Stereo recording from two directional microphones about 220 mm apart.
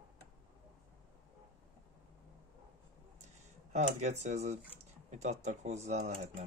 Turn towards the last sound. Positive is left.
turn(degrees=-30)  # may be behind; listen again after turning